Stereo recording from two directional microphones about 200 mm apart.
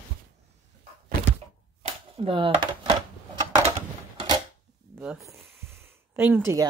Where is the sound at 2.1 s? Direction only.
25° right (ahead or behind).